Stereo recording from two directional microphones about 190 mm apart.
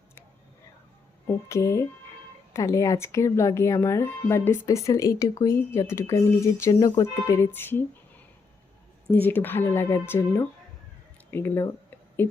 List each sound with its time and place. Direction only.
1.3 s speech: 15° left (ahead or behind)
9.0 s speech: 10° left (ahead or behind)